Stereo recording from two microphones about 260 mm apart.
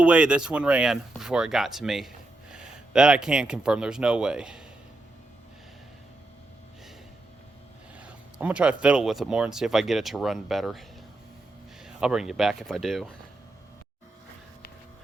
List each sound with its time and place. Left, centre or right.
0.0 s speech: centre
7.9 s speech: centre
11.9 s speech: centre